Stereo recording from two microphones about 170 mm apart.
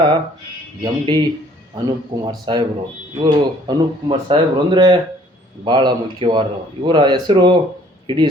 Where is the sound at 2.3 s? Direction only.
25° right (ahead or behind).